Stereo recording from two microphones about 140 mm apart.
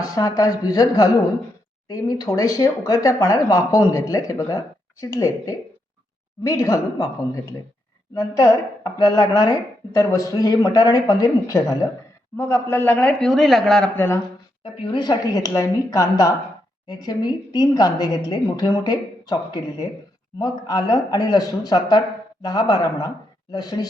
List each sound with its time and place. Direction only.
0.0 s speech: 25° left (ahead or behind)
8.1 s speech: 20° left (ahead or behind)
12.4 s speech: 15° left (ahead or behind)
14.6 s speech: 35° left (ahead or behind)